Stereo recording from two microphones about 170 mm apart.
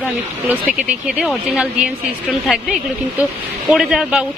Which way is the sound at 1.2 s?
5° right (ahead or behind).